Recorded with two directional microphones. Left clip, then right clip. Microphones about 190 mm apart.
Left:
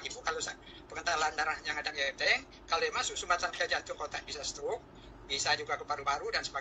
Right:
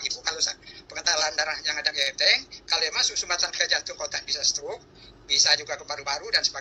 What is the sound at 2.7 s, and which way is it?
A man's voice, 15° right (ahead or behind).